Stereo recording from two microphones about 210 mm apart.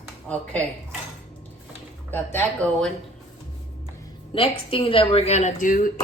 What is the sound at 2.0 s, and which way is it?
Speech, 10° left (ahead or behind).